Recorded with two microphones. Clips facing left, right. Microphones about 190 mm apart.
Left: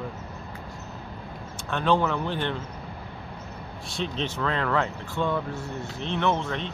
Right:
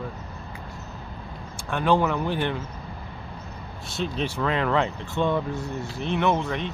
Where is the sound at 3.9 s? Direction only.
5° right (ahead or behind).